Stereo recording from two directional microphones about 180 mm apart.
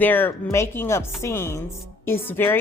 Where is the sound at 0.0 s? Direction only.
10° left (ahead or behind).